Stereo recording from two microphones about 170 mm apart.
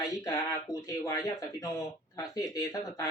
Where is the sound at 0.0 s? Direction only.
20° left (ahead or behind).